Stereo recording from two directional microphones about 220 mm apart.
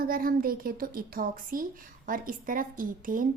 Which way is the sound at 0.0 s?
40° right (ahead or behind).